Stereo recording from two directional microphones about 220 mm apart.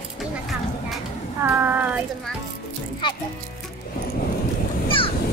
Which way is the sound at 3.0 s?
20° left (ahead or behind).